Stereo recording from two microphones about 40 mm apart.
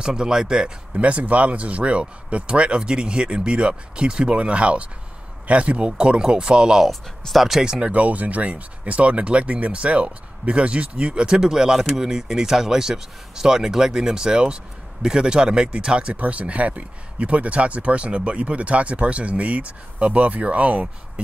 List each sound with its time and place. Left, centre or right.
0.0 s speech: right
1.0 s speech: right
5.8 s speech: centre
6.8 s speech: centre
7.6 s speech: right
7.9 s speech: right
11.2 s speech: centre
16.2 s speech: right